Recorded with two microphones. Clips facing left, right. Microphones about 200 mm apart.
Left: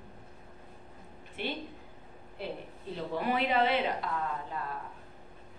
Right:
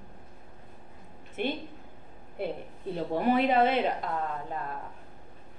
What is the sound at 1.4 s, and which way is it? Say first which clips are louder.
A woman's voice: right 5 dB; 50° right (ahead or behind).